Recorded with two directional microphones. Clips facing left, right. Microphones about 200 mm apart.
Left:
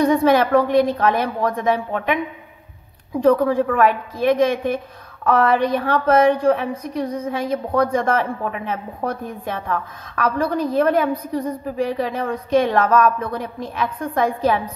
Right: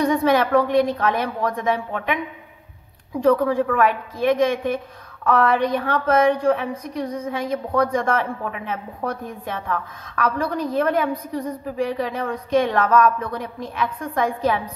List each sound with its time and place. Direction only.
0.0 s a woman's voice: 30° left (ahead or behind)
3.2 s a woman's voice: 35° left (ahead or behind)